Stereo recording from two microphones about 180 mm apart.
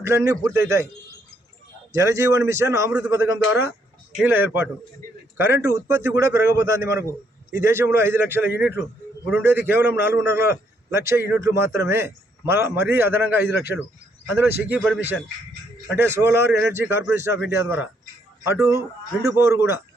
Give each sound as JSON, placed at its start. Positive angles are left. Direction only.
{"t": 0.0, "sound": "a man's voice", "side_deg": -15}
{"t": 1.9, "sound": "a man's voice", "side_deg": -15}
{"t": 16.0, "sound": "a man's voice", "side_deg": -15}